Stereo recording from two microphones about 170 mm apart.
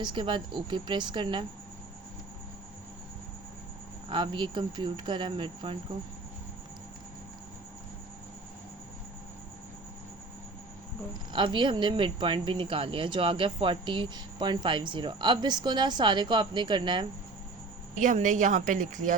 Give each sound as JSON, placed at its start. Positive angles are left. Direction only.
{"t": 0.0, "sound": "speech", "side_deg": -30}
{"t": 4.1, "sound": "speech", "side_deg": -30}
{"t": 11.3, "sound": "speech", "side_deg": -30}
{"t": 18.0, "sound": "speech", "side_deg": -45}